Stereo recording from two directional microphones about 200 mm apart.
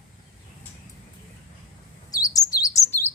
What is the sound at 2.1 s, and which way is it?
Chirp, 15° left (ahead or behind).